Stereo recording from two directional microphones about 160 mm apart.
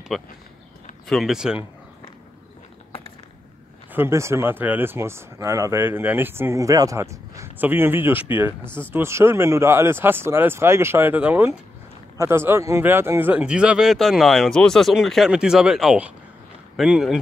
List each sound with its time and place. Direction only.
0.1 s speech: centre (ahead or behind)
3.9 s speech: 15° right (ahead or behind)